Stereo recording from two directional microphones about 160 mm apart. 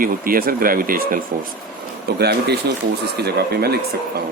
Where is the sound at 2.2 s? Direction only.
90° right.